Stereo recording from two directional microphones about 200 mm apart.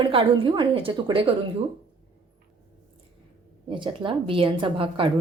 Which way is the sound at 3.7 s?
25° right (ahead or behind).